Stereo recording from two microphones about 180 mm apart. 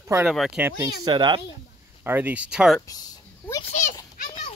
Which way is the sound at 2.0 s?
10° right (ahead or behind).